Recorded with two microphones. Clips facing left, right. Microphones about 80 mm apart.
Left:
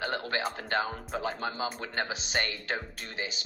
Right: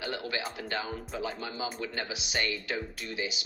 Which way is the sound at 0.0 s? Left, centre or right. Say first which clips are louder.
Left 3 dB; left.